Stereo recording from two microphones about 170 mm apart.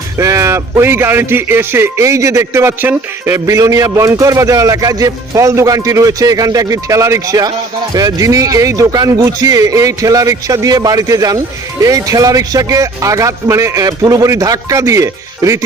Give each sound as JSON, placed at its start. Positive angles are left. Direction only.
{"t": 0.2, "sound": "a man's voice", "side_deg": -15}